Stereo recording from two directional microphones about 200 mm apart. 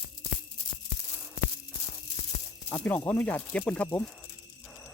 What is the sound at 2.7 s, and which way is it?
Speech, 10° left (ahead or behind).